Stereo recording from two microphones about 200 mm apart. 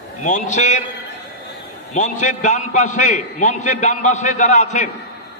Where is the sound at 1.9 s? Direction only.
35° left (ahead or behind).